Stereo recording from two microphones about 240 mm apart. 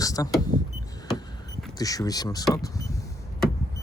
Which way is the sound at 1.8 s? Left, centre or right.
Centre.